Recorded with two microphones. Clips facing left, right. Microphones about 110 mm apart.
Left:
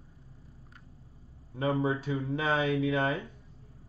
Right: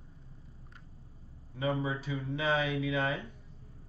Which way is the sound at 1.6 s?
40° left (ahead or behind).